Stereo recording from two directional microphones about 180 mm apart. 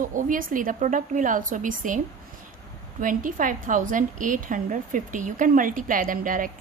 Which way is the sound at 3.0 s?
50° right (ahead or behind).